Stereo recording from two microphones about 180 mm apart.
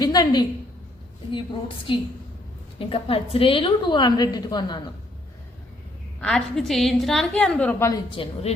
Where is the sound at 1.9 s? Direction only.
30° left (ahead or behind).